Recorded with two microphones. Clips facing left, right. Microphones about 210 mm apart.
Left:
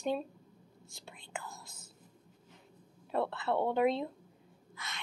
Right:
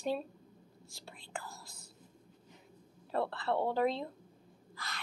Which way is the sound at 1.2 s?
35° right (ahead or behind).